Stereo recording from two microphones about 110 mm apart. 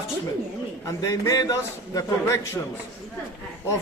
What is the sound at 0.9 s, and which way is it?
A man's voice, 30° left (ahead or behind).